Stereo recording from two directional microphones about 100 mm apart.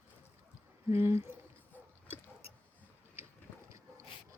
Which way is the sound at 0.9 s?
25° right (ahead or behind).